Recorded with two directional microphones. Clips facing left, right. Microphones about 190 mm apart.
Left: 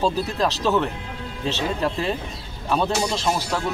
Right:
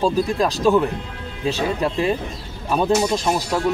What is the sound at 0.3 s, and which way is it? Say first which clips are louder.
Speech: right 4 dB; 10° right (ahead or behind).